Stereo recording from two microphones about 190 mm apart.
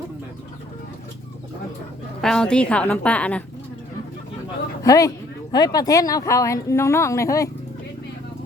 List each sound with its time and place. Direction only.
2.2 s speech: 5° left (ahead or behind)
4.8 s speech: 15° left (ahead or behind)